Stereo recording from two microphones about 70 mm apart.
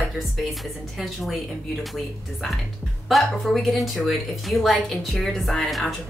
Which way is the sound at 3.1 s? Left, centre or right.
Centre.